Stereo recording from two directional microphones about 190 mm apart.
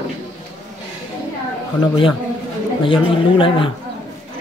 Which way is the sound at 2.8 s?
25° left (ahead or behind).